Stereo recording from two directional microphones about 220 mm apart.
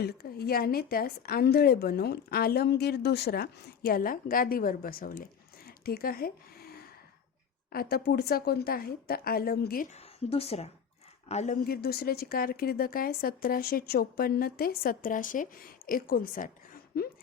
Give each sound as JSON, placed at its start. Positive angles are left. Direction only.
{"t": 0.0, "sound": "a woman's voice", "side_deg": 45}
{"t": 11.6, "sound": "a woman's voice", "side_deg": 45}